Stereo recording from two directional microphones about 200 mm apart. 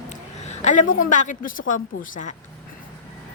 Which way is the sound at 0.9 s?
40° left (ahead or behind).